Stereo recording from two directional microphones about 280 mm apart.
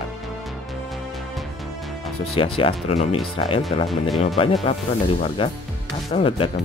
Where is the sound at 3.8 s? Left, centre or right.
Centre.